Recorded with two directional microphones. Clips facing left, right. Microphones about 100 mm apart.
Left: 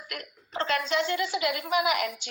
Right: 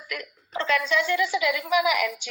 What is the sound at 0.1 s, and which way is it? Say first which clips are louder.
Speech: right 4 dB; 40° left (ahead or behind).